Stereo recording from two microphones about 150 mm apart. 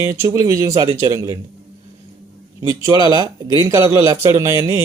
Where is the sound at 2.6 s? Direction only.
20° right (ahead or behind).